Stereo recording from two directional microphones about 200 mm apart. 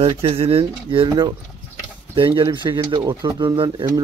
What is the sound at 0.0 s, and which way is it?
Speech, 30° right (ahead or behind).